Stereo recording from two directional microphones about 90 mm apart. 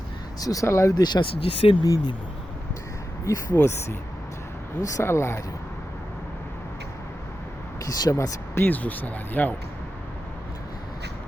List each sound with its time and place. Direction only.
0.3 s speech: 40° left (ahead or behind)
1.2 s speech: 85° left
1.8 s speech: 45° left (ahead or behind)
3.5 s speech: 25° left (ahead or behind)
4.8 s speech: 35° left (ahead or behind)
7.9 s speech: 40° left (ahead or behind)
8.5 s speech: 20° left (ahead or behind)